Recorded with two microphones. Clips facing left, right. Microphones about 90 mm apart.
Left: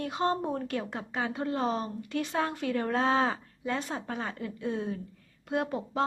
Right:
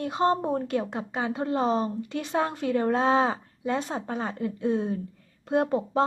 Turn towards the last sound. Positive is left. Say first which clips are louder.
# right 7 dB
turn(degrees=-30)  # may be behind; listen again after turning